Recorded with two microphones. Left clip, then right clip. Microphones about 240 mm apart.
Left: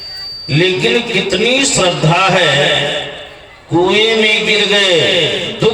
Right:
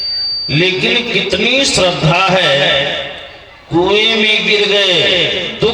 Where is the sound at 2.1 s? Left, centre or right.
Right.